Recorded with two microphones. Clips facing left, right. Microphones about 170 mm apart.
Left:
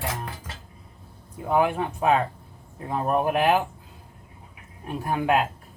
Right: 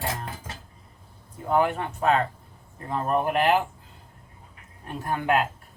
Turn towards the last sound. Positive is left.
turn(degrees=15)  # may be behind; listen again after turning